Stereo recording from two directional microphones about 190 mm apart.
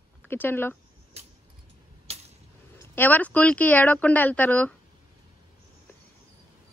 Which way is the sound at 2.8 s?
10° left (ahead or behind).